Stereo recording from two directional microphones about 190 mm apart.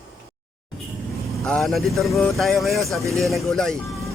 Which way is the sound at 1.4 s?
Centre (ahead or behind).